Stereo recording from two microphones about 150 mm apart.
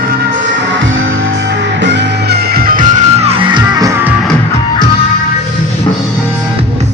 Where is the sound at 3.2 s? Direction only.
40° right (ahead or behind).